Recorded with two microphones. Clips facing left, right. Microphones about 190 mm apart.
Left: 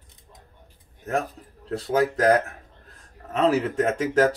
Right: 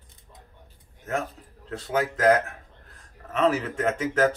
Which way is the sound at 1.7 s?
35° left (ahead or behind).